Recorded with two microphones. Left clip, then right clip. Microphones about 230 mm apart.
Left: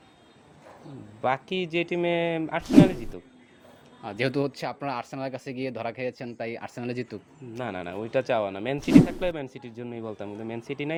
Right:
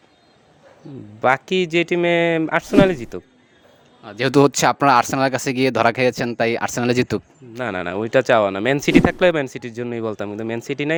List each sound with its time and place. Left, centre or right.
1.2 s speech: right
4.2 s speech: right